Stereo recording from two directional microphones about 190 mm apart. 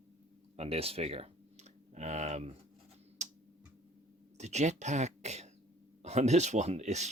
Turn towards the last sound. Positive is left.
turn(degrees=-35)  # may be behind; listen again after turning